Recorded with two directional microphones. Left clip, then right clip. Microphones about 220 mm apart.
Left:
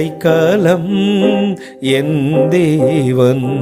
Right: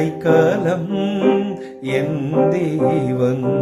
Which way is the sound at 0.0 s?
45° left (ahead or behind).